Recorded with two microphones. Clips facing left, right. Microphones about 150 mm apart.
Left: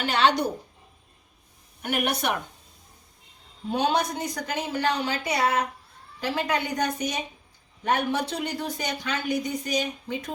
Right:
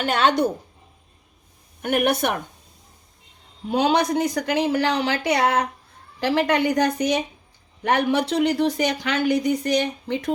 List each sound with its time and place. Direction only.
0.0 s speech: 50° right (ahead or behind)
1.8 s speech: 55° right (ahead or behind)
3.7 s a woman's voice: 80° right